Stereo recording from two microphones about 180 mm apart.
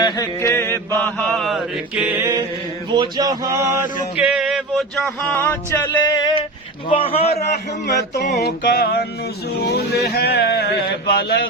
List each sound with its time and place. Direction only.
0.0 s chant: 15° left (ahead or behind); by 2.4 s 15° right (ahead or behind)
2.9 s male singing: 25° right (ahead or behind)
4.2 s speech: 5° right (ahead or behind)
5.3 s music: 10° left (ahead or behind)
6.8 s a man's voice: 30° left (ahead or behind)
7.9 s a sound: 65° left (ahead or behind)